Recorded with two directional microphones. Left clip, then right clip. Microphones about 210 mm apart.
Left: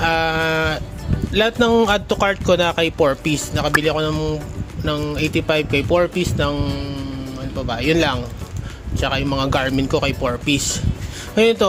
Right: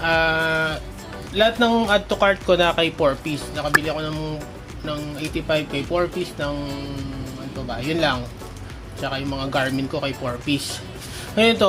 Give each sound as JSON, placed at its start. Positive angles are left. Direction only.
{"t": 0.0, "sound": "a sound", "side_deg": 30}
{"t": 1.3, "sound": "speech", "side_deg": 45}
{"t": 4.9, "sound": "speech", "side_deg": 40}
{"t": 7.7, "sound": "speech", "side_deg": 40}